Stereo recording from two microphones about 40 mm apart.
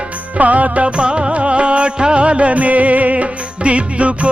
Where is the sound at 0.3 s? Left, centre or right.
Right.